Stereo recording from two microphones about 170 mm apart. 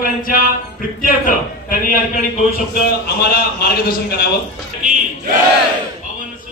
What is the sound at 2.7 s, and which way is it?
A man's voice, 65° left (ahead or behind).